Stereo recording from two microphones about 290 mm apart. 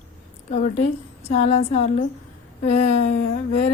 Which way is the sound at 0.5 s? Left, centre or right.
Left.